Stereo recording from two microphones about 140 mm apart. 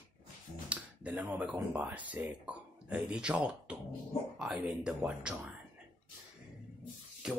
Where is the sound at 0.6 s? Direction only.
10° right (ahead or behind).